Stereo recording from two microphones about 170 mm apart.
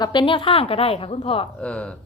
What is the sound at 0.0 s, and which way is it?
A woman's voice, 30° left (ahead or behind).